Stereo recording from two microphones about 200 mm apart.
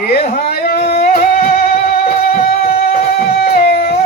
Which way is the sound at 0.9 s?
50° left (ahead or behind).